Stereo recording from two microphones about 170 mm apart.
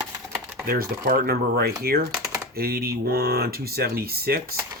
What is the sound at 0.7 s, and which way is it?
Speech, 60° right (ahead or behind).